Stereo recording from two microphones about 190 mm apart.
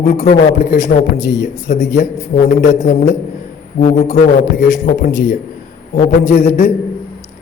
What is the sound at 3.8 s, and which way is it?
Speech, 40° left (ahead or behind).